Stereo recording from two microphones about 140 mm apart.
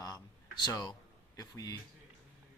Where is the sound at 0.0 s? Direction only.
30° left (ahead or behind).